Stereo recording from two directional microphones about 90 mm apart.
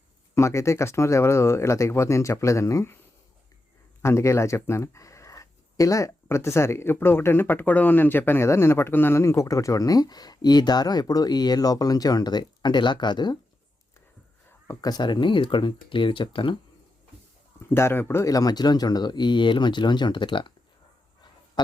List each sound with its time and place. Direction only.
0.3 s speech: 30° left (ahead or behind)
4.0 s speech: 30° left (ahead or behind); by 13.4 s 55° left (ahead or behind)
14.8 s speech: 50° left (ahead or behind); by 16.6 s 70° left (ahead or behind)
17.7 s speech: 30° left (ahead or behind)
18.3 s speech: 45° left (ahead or behind); by 20.5 s 65° left (ahead or behind)